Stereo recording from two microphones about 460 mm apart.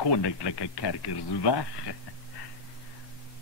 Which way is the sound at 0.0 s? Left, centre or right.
Left.